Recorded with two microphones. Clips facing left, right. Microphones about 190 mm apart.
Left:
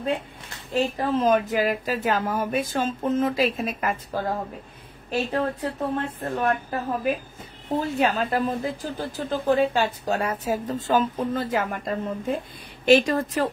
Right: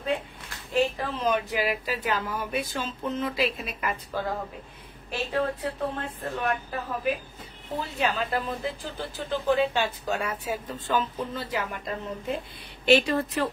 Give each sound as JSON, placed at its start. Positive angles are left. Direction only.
{"t": 0.7, "sound": "speech", "side_deg": 40}
{"t": 5.3, "sound": "speech", "side_deg": 45}
{"t": 7.8, "sound": "speech", "side_deg": 50}